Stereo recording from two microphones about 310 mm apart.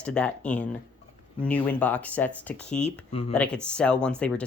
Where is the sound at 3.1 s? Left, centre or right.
Centre.